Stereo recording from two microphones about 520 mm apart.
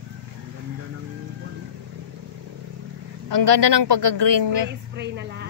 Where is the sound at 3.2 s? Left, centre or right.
Right.